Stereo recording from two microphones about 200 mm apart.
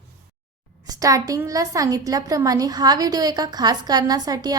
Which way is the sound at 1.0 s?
15° right (ahead or behind).